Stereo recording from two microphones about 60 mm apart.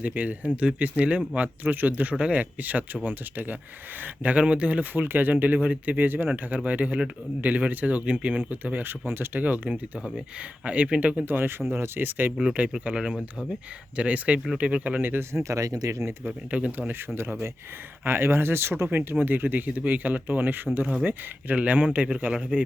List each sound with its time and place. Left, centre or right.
0.0 s speech: right
4.9 s speech: right
11.3 s speech: right
12.4 s speech: centre
15.4 s speech: right
16.2 s speech: right
18.0 s speech: right